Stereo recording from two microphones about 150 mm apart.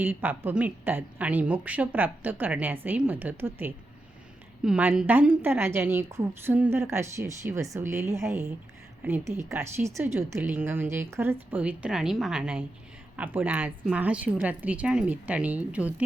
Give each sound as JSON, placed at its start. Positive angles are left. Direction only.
{"t": 0.0, "sound": "a woman's voice", "side_deg": -10}